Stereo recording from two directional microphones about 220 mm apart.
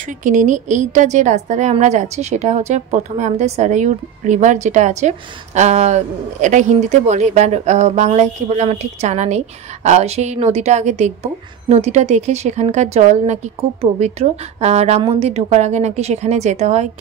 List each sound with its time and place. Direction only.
0.2 s a woman's voice: 35° right (ahead or behind)